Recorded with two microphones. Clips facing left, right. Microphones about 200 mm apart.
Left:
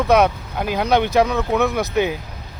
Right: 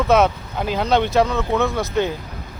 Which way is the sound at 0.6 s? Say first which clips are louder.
Even; 5° left (ahead or behind).